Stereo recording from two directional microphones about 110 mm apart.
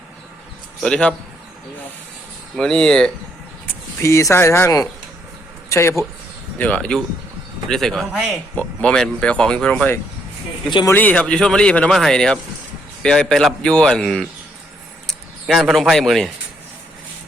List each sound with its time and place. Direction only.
0.8 s speech: 5° left (ahead or behind)
2.6 s speech: 5° left (ahead or behind)
4.0 s speech: 25° left (ahead or behind)
6.6 s speech: 10° left (ahead or behind)